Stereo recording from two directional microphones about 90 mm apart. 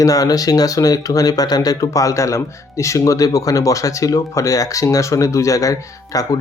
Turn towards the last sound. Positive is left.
turn(degrees=40)  # may be behind; listen again after turning